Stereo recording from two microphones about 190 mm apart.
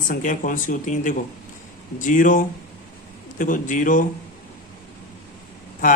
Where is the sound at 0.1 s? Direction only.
45° left (ahead or behind).